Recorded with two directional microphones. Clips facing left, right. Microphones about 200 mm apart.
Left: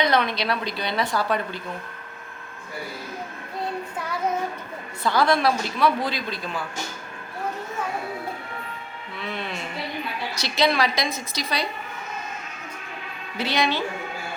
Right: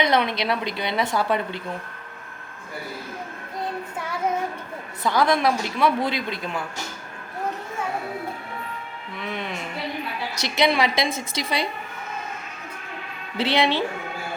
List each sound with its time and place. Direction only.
0.0 s a woman's voice: 20° right (ahead or behind)
5.0 s a woman's voice: 15° right (ahead or behind)
9.1 s a woman's voice: 15° right (ahead or behind)
13.3 s a woman's voice: 30° right (ahead or behind)